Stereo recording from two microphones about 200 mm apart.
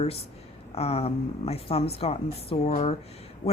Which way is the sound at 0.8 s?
30° left (ahead or behind).